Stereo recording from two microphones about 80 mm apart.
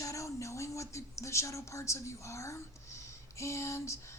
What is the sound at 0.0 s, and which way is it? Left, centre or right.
Speech, left.